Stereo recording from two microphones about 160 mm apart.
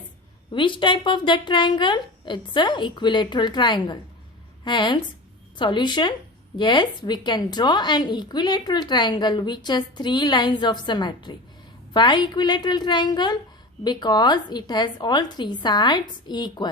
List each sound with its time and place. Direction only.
0.5 s a woman's voice: 30° left (ahead or behind)